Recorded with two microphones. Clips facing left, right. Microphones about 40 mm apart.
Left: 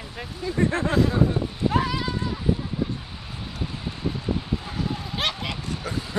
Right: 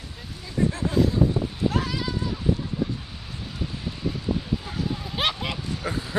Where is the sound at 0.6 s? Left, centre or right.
Left.